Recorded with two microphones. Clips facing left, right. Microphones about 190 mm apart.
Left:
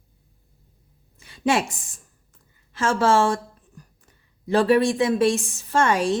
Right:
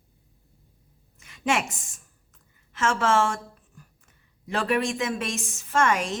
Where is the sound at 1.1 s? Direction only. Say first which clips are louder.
Left 4 dB; 30° left (ahead or behind).